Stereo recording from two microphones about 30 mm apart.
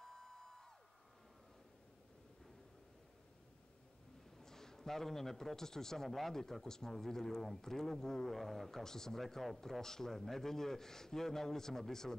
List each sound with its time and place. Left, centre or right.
0.0 s a sound: centre
4.4 s a man's voice: centre
9.2 s speech: centre